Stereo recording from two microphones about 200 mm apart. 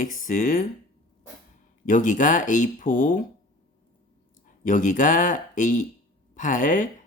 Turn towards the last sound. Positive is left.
turn(degrees=40)  # may be behind; listen again after turning